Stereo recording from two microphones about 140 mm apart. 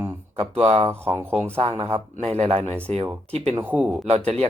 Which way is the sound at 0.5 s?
50° right (ahead or behind).